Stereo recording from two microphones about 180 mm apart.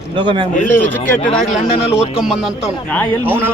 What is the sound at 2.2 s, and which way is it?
Speech, 5° right (ahead or behind).